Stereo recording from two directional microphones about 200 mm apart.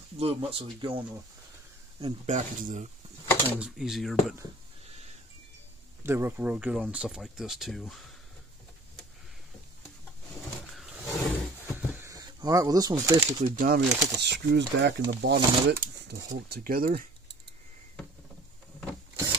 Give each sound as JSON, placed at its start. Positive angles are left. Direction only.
{"t": 0.2, "sound": "speech", "side_deg": -30}
{"t": 2.2, "sound": "speech", "side_deg": -40}
{"t": 3.4, "sound": "speech", "side_deg": -5}
{"t": 6.0, "sound": "speech", "side_deg": -10}
{"t": 10.7, "sound": "vehicle", "side_deg": 0}
{"t": 12.0, "sound": "speech", "side_deg": -15}
{"t": 13.4, "sound": "speech", "side_deg": -45}